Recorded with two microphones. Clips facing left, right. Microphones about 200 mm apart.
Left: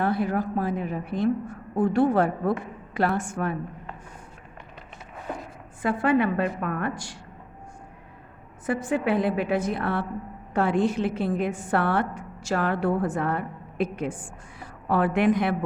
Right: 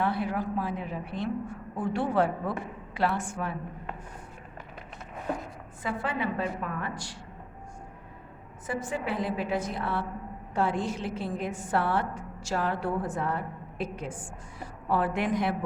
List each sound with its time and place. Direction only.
0.0 s a woman's voice: 45° left (ahead or behind)
5.8 s a woman's voice: 55° left (ahead or behind)
8.6 s a woman's voice: 60° left (ahead or behind)